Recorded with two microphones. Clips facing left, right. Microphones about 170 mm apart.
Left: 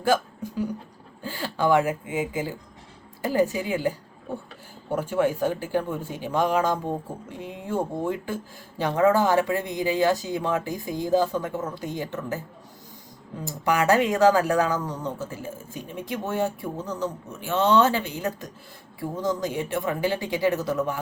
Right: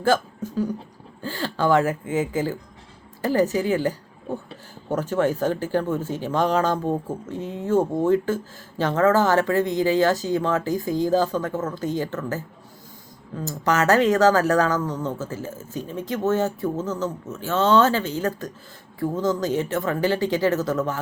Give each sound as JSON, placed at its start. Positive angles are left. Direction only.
{"t": 0.0, "sound": "speech", "side_deg": 10}
{"t": 13.7, "sound": "speech", "side_deg": 15}